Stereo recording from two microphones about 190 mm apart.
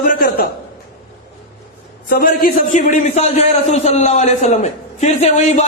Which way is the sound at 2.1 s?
50° left (ahead or behind).